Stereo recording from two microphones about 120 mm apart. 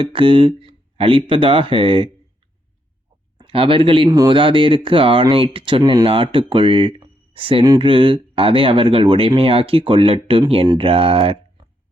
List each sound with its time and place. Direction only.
0.0 s speech: 45° right (ahead or behind)
3.3 s speech: 45° right (ahead or behind)